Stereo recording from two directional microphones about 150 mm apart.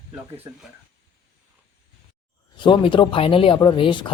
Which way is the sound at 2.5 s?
30° left (ahead or behind).